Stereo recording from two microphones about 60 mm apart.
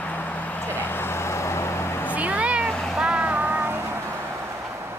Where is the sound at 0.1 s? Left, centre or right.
Left.